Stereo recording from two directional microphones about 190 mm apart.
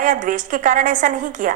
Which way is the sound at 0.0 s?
40° right (ahead or behind).